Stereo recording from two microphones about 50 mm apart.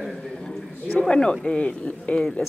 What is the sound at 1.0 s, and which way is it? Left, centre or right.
Speech, centre.